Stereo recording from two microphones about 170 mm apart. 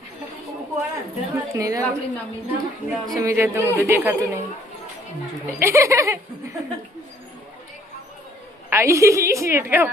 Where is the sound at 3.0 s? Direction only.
20° right (ahead or behind).